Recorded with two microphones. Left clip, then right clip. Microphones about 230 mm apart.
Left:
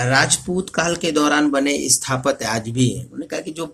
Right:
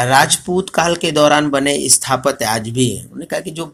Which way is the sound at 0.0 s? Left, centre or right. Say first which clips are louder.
Right 5 dB; right.